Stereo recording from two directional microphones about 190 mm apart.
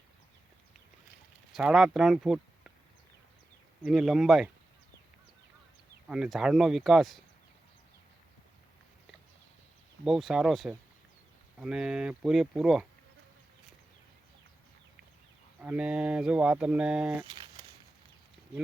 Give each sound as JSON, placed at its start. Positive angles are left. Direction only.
{"t": 1.5, "sound": "speech", "side_deg": 0}
{"t": 3.8, "sound": "speech", "side_deg": 0}
{"t": 6.1, "sound": "speech", "side_deg": -5}
{"t": 10.0, "sound": "speech", "side_deg": 0}
{"t": 15.6, "sound": "speech", "side_deg": -5}
{"t": 17.2, "sound": "a sound", "side_deg": -25}